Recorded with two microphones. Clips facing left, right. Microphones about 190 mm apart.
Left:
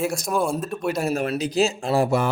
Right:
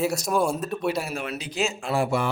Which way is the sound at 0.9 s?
45° left (ahead or behind).